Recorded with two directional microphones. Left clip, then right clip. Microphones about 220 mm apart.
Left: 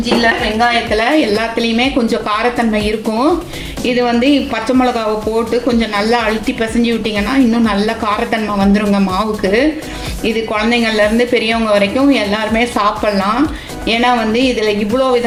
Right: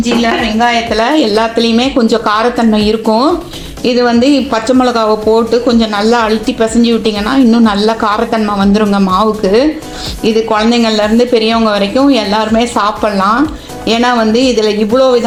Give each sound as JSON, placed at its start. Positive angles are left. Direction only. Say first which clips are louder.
{"t": 0.2, "sound": "speech", "louder": "right 1 dB", "side_deg": -20}